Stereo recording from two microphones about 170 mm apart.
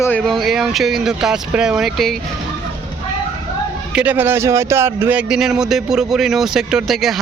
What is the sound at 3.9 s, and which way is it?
A man's voice, 10° right (ahead or behind).